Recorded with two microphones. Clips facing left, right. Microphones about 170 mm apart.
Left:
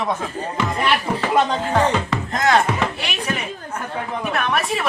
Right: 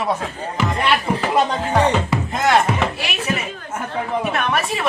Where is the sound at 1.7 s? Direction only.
10° right (ahead or behind).